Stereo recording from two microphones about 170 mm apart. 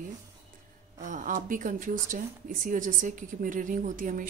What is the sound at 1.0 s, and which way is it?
A woman's voice, 50° right (ahead or behind).